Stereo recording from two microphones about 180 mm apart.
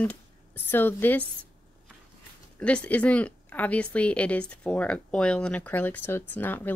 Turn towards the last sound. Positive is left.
turn(degrees=10)  # may be behind; listen again after turning